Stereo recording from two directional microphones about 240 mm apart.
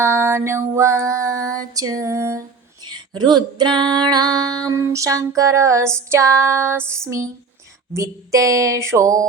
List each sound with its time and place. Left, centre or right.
0.0 s female singing: centre